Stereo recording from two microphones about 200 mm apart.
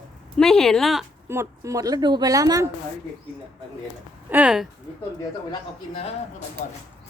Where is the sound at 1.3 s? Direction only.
15° right (ahead or behind).